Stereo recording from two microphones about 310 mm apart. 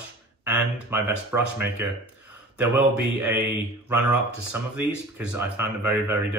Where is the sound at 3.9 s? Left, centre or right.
Centre.